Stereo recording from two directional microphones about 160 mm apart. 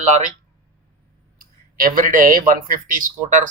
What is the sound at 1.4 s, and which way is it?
Speech, 60° right (ahead or behind).